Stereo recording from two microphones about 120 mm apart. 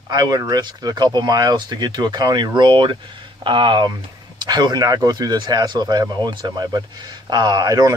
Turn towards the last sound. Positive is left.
turn(degrees=-30)  # may be behind; listen again after turning